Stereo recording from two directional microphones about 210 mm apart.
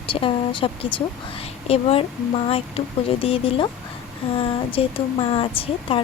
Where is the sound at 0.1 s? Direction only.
25° left (ahead or behind).